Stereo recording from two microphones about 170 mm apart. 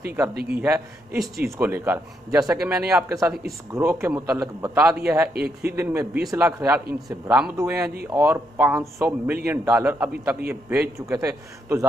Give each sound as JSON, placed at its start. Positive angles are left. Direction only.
{"t": 0.0, "sound": "speech", "side_deg": -15}
{"t": 0.3, "sound": "a man's voice", "side_deg": -65}
{"t": 0.6, "sound": "speech", "side_deg": -15}
{"t": 2.9, "sound": "speech", "side_deg": -15}
{"t": 5.3, "sound": "a man's voice", "side_deg": -65}
{"t": 6.3, "sound": "speech", "side_deg": -15}